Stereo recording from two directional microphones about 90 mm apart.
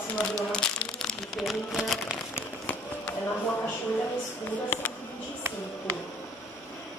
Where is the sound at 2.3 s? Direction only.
20° left (ahead or behind).